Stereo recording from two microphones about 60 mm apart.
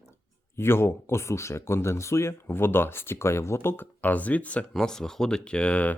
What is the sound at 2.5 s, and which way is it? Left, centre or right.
Speech, left.